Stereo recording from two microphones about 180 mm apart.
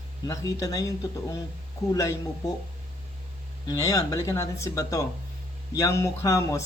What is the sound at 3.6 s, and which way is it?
Speech, 20° left (ahead or behind).